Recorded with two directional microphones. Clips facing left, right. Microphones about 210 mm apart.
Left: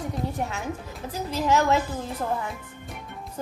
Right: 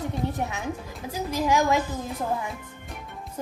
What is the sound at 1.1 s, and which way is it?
Speech, 10° right (ahead or behind).